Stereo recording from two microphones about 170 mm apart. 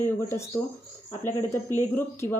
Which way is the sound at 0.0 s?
15° left (ahead or behind).